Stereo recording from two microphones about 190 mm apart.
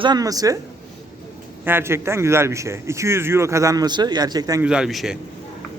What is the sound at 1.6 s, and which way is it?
A man's voice, 10° right (ahead or behind).